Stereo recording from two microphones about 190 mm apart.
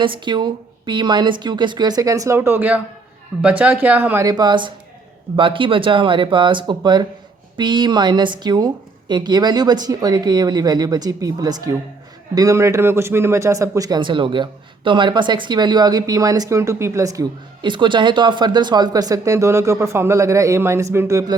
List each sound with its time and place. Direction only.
0.0 s a woman's voice: 25° right (ahead or behind)